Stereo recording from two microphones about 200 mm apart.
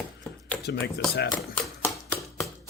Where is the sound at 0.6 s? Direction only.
55° left (ahead or behind).